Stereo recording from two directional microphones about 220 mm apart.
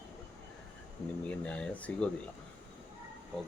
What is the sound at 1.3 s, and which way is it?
Speech, 5° left (ahead or behind).